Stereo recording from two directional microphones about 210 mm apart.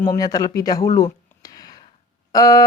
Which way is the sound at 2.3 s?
15° left (ahead or behind).